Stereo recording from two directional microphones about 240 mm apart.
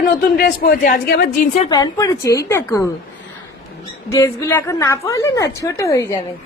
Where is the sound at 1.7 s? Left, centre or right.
Centre.